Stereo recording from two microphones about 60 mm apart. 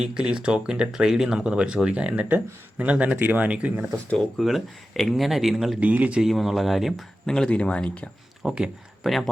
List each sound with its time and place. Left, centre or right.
0.0 s speech: centre
3.9 s speech: centre
4.4 s speech: centre
7.3 s speech: centre
8.4 s speech: centre
9.0 s speech: centre